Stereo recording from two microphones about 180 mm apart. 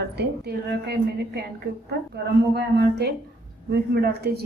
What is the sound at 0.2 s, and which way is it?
A woman's voice, 65° right (ahead or behind).